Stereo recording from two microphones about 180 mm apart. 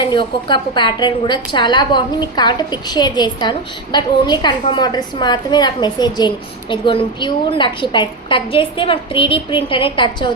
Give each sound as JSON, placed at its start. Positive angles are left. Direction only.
{"t": 0.0, "sound": "a woman's voice", "side_deg": 25}